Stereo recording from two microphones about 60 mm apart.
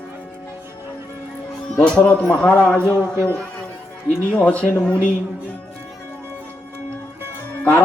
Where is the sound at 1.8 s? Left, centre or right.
Left.